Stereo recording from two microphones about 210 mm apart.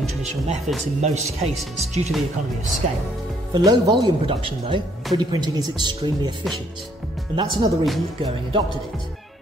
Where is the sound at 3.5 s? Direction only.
20° right (ahead or behind).